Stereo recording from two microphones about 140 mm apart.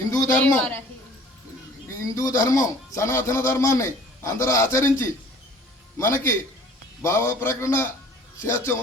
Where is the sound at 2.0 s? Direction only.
25° left (ahead or behind).